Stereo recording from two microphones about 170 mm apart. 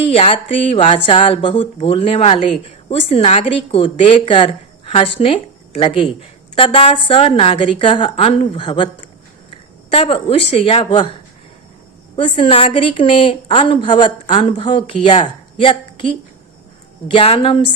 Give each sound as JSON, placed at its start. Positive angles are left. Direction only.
{"t": 0.1, "sound": "speech", "side_deg": 35}
{"t": 9.9, "sound": "speech", "side_deg": 35}
{"t": 12.1, "sound": "speech", "side_deg": 30}